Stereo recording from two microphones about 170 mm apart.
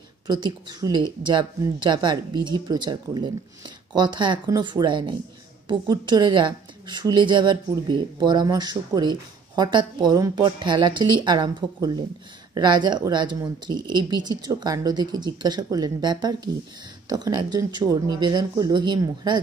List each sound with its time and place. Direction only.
0.3 s speech: 25° right (ahead or behind)